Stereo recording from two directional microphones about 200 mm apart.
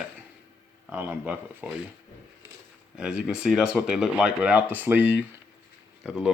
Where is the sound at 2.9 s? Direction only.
5° right (ahead or behind).